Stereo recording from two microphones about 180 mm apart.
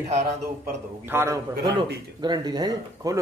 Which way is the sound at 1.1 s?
15° right (ahead or behind).